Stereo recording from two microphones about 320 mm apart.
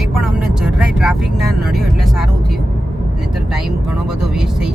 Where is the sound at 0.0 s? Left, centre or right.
Centre.